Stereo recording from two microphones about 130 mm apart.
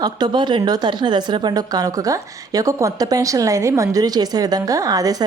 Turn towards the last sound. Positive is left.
turn(degrees=-30)  # may be behind; listen again after turning